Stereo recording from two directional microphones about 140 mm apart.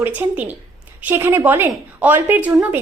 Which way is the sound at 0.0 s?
10° right (ahead or behind).